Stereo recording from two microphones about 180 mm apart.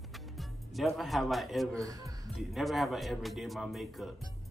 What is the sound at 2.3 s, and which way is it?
A man's voice, centre (ahead or behind).